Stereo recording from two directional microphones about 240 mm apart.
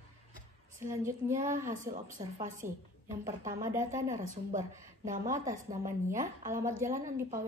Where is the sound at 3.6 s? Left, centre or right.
Centre.